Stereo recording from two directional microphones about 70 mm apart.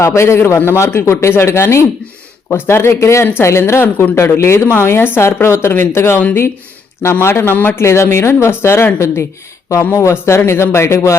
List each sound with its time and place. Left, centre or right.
0.0 s speech: left
6.1 s speech: left
7.0 s speech: left
7.8 s speech: left
9.9 s speech: left